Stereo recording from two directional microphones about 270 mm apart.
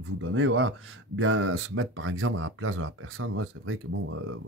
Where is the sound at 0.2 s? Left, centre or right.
Right.